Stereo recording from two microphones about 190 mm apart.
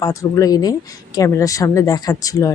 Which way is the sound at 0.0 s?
15° left (ahead or behind).